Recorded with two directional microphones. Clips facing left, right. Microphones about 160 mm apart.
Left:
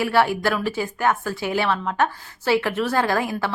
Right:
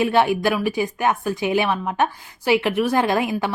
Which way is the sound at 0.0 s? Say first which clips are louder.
Right 2 dB; 20° right (ahead or behind).